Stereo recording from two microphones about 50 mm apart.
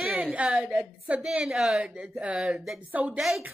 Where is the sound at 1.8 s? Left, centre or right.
Right.